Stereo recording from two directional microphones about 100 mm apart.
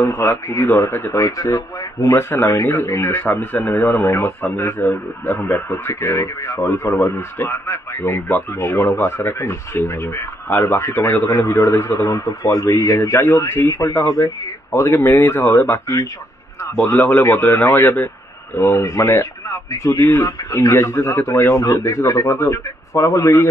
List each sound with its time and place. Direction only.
0.0 s speech: 25° left (ahead or behind)
16.8 s speech: 20° left (ahead or behind)